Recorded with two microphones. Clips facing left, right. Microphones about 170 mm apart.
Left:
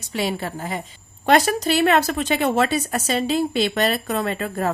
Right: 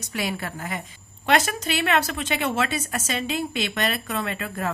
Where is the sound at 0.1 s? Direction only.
30° left (ahead or behind).